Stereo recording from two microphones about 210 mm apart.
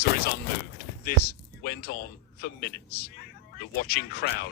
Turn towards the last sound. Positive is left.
turn(degrees=50)  # may be behind; listen again after turning